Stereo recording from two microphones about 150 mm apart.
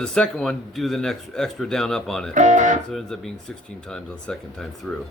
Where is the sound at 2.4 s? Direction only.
55° right (ahead or behind).